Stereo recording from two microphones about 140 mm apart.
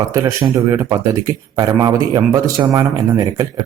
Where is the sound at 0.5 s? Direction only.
20° right (ahead or behind).